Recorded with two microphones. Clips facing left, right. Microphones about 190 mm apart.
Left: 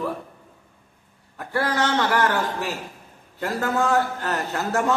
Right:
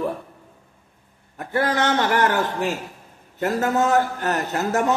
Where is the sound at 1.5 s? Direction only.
20° right (ahead or behind).